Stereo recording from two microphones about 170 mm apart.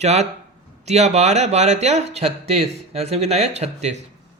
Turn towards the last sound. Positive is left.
turn(degrees=-40)  # may be behind; listen again after turning